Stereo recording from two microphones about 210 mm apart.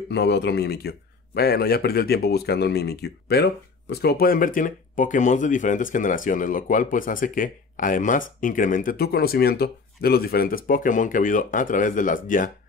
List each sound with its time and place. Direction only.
0.1 s a man's voice: 55° left (ahead or behind); by 12.4 s 40° left (ahead or behind)